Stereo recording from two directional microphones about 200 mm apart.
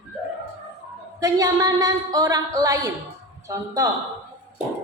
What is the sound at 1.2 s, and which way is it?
A woman's voice, 15° right (ahead or behind).